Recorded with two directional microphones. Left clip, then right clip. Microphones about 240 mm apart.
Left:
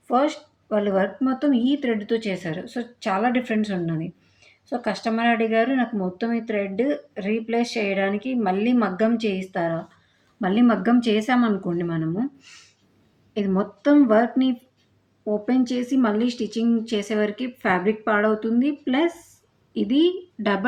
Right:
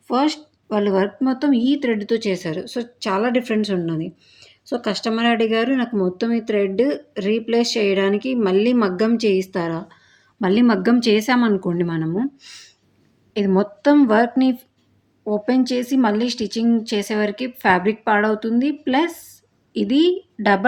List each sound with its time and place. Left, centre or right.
0.1 s speech: right